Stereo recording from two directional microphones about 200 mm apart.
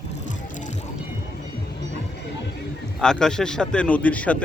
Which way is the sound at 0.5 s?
35° left (ahead or behind).